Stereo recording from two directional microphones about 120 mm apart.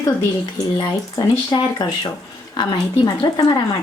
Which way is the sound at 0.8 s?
40° left (ahead or behind).